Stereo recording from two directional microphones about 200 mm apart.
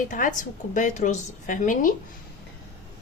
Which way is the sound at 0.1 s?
40° left (ahead or behind).